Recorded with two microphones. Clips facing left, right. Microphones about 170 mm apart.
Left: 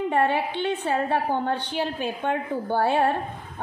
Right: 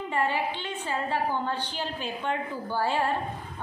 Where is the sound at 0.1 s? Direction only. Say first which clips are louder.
Left 2 dB; 60° left (ahead or behind).